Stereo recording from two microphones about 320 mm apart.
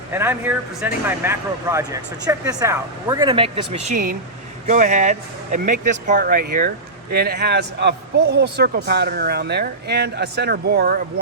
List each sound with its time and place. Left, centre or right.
0.1 s a man's voice: centre; by 11.0 s right